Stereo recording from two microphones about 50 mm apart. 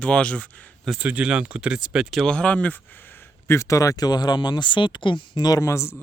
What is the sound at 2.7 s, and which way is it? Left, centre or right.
Speech, left.